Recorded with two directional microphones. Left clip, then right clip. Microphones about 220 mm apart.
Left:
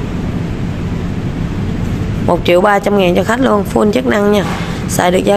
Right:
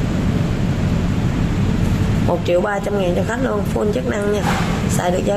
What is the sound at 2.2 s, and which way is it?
Speech, 40° left (ahead or behind).